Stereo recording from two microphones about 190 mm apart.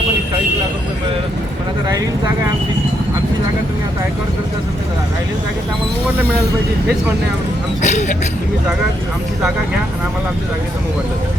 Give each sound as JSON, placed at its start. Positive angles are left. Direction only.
{"t": 7.8, "sound": "speech", "side_deg": 40}